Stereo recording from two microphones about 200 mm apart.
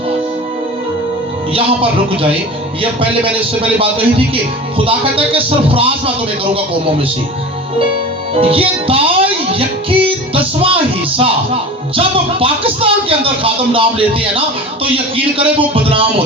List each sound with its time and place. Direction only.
4.9 s speech: 30° right (ahead or behind)
8.4 s music: 30° right (ahead or behind)
11.9 s speech: 25° right (ahead or behind)